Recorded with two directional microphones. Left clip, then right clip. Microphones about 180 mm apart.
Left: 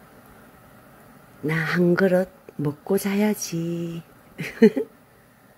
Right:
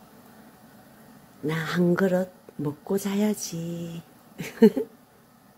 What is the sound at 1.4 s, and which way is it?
Speech, 15° left (ahead or behind).